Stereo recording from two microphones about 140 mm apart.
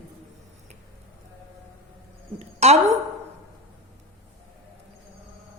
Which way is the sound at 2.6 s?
50° right (ahead or behind).